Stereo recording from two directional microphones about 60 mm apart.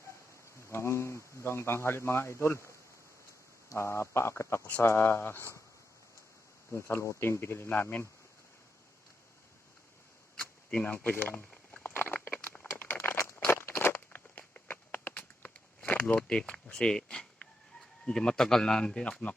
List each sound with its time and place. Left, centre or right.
0.7 s a man's voice: left
6.7 s a man's voice: left
10.7 s speech: left
11.8 s a sound: left; by 19.0 s centre